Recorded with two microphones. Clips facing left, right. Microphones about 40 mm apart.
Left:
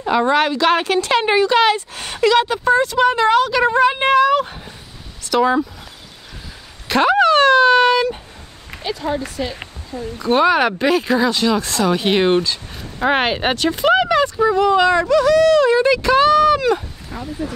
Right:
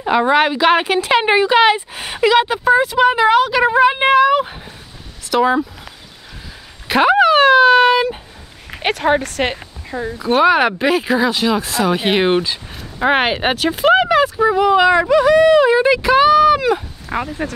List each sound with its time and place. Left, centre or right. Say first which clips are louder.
0.0 s speech: right 2 dB; centre
6.9 s dog: right 2 dB; centre
8.8 s speech: right 7 dB; right
10.1 s speech: right 2 dB; centre
17.1 s speech: right 5 dB; right